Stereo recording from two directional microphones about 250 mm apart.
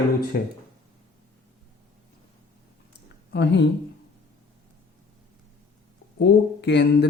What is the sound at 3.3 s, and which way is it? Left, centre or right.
Speech, left.